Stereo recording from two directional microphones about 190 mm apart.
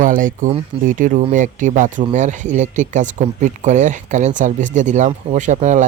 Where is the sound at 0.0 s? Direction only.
45° right (ahead or behind).